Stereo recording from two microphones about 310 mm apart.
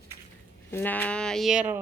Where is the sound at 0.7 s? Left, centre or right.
Centre.